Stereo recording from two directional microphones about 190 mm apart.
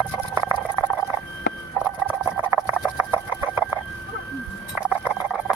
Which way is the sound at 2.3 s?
10° right (ahead or behind).